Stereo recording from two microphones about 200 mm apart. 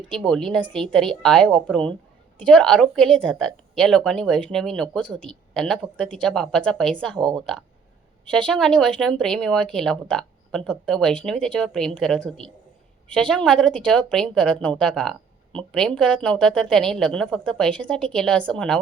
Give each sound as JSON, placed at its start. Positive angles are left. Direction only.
{"t": 0.1, "sound": "speech", "side_deg": 5}